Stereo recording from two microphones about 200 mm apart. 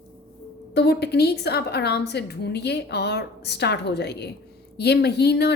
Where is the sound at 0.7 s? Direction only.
55° left (ahead or behind).